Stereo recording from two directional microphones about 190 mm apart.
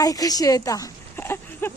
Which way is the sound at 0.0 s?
20° left (ahead or behind).